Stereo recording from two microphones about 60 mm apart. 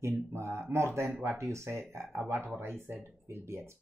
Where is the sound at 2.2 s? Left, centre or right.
Right.